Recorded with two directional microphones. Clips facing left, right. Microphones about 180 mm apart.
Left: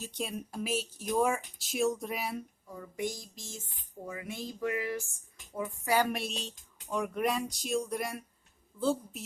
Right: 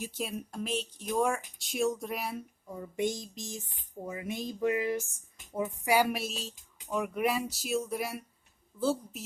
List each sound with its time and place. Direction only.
0.0 s speech: 5° right (ahead or behind)
2.6 s speech: 25° right (ahead or behind); by 9.2 s 5° right (ahead or behind)